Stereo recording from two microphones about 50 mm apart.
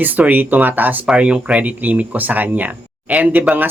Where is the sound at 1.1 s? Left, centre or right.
Right.